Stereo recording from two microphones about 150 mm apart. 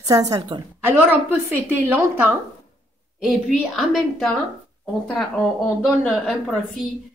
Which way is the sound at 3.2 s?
Centre (ahead or behind).